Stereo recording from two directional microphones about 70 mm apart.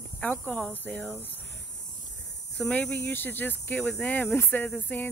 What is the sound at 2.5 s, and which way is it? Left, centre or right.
Speech, centre.